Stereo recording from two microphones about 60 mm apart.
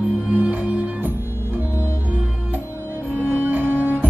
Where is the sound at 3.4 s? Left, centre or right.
Right.